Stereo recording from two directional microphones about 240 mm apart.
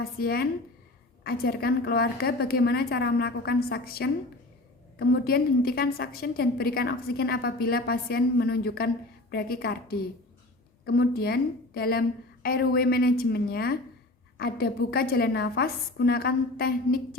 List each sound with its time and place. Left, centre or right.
0.0 s a woman's voice: left